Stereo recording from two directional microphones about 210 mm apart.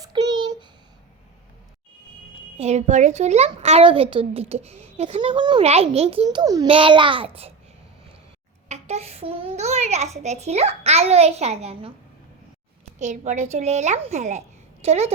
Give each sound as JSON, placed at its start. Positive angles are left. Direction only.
{"t": 0.0, "sound": "a sound", "side_deg": -20}
{"t": 2.6, "sound": "a child's voice", "side_deg": -30}
{"t": 8.7, "sound": "a child's voice", "side_deg": -30}
{"t": 13.0, "sound": "a child's voice", "side_deg": -35}